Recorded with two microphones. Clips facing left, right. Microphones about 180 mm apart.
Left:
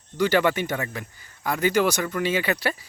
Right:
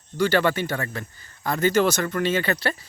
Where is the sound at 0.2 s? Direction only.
15° left (ahead or behind).